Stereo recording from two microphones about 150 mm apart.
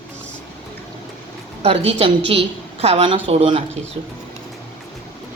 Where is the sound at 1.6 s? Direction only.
40° right (ahead or behind).